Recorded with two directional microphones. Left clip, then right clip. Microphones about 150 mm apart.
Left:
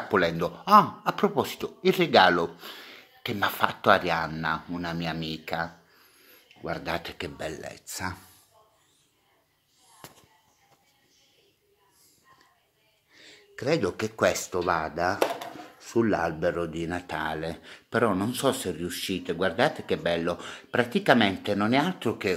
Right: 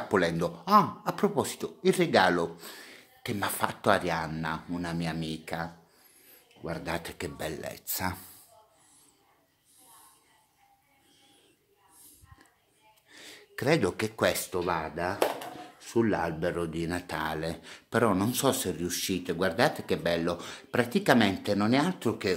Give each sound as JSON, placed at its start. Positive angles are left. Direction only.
{"t": 0.1, "sound": "speech", "side_deg": -15}
{"t": 13.1, "sound": "a sound", "side_deg": -85}
{"t": 13.7, "sound": "speech", "side_deg": -20}